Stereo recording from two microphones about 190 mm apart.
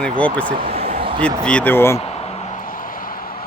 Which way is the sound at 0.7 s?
30° right (ahead or behind).